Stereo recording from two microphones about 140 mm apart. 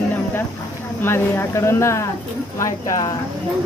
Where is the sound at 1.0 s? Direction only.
15° left (ahead or behind).